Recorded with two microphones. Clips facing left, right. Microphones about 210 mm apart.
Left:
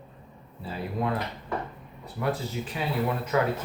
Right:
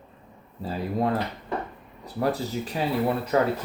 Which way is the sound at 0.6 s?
40° right (ahead or behind).